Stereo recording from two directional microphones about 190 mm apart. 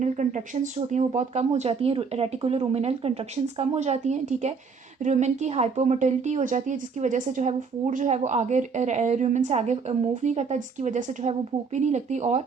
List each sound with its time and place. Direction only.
0.0 s a woman's voice: 40° right (ahead or behind)